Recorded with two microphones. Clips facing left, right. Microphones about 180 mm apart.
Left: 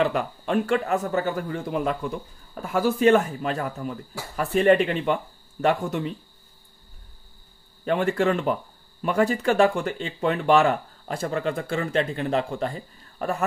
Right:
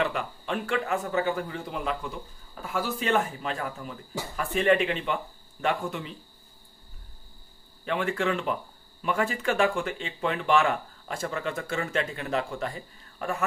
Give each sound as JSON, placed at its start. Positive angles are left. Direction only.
{"t": 0.0, "sound": "speech", "side_deg": 40}
{"t": 7.8, "sound": "speech", "side_deg": 40}